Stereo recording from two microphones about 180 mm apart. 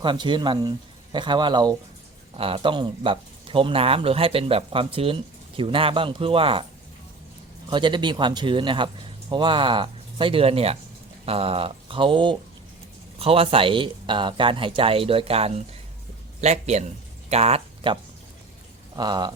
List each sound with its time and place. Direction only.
0.0 s speech: 25° right (ahead or behind)
7.7 s speech: 25° right (ahead or behind)
18.9 s speech: 25° right (ahead or behind)